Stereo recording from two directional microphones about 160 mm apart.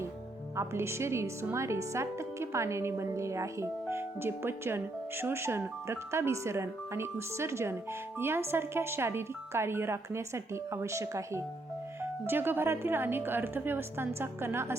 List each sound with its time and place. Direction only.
0.5 s speech: 15° right (ahead or behind)